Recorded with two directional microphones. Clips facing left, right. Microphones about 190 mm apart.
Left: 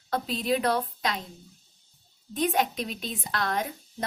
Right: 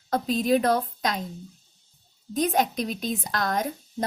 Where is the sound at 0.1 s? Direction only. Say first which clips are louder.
Right 5 dB; 45° right (ahead or behind).